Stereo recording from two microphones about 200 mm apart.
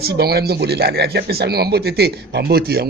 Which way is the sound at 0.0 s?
50° right (ahead or behind).